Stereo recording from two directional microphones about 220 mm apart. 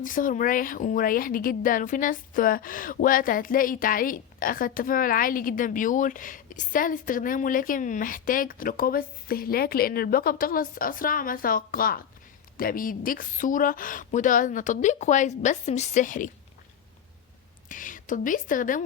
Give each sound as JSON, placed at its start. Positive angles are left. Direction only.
{"t": 0.0, "sound": "a woman's voice", "side_deg": 35}
{"t": 17.7, "sound": "a woman's voice", "side_deg": 35}